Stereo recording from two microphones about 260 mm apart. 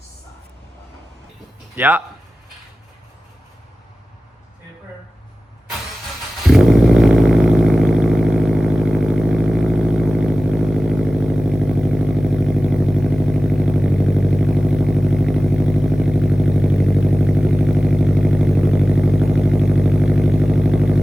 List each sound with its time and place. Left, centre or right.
1.7 s speech: centre
6.5 s vehicle: centre